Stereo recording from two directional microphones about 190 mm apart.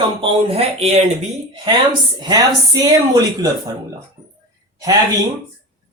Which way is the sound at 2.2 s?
20° right (ahead or behind).